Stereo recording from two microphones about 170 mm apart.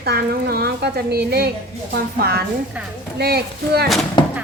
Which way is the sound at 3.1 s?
70° right (ahead or behind).